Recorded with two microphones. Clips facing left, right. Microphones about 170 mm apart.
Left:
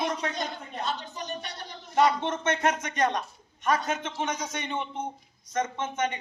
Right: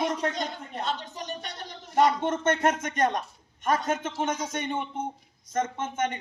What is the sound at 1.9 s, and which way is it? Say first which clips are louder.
A man's voice: right 1 dB; 45° right (ahead or behind).